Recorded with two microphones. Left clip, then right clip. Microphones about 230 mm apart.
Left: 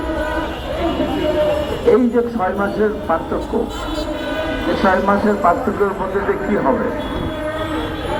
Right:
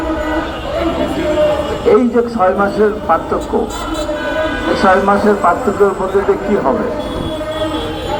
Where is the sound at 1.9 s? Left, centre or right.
Right.